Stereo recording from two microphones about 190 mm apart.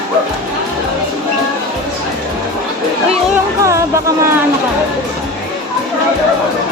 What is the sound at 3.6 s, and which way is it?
Speech, 15° right (ahead or behind).